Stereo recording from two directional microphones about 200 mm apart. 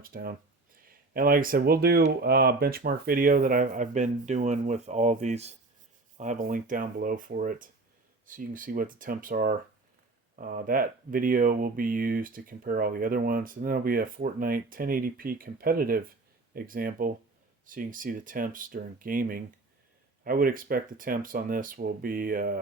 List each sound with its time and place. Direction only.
0.0 s speech: 45° right (ahead or behind)